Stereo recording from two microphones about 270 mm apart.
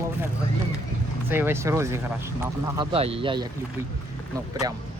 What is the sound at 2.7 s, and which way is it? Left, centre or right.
Speech, right.